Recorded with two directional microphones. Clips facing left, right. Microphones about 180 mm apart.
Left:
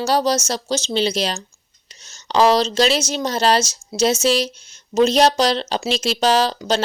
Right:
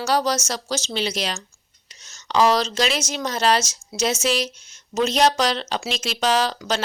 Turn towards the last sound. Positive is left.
turn(degrees=30)  # may be behind; listen again after turning